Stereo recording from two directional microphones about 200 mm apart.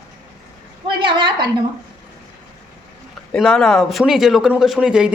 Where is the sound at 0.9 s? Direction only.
25° right (ahead or behind).